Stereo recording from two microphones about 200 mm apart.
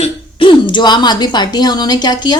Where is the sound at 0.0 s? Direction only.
25° left (ahead or behind).